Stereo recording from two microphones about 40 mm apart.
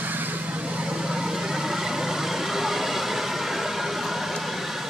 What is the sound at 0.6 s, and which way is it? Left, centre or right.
Vehicle, right.